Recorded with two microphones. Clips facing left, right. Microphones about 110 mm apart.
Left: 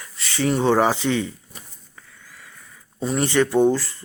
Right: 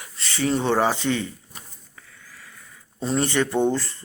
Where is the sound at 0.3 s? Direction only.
15° left (ahead or behind).